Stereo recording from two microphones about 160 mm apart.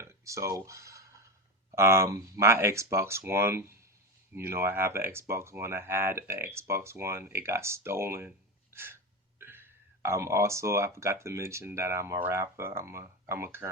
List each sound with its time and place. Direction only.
0.0 s speech: 20° right (ahead or behind)
8.7 s gasp: 15° right (ahead or behind)
9.4 s speech: 15° right (ahead or behind)